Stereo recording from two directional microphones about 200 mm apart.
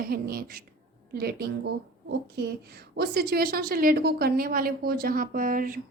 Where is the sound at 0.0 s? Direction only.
45° right (ahead or behind).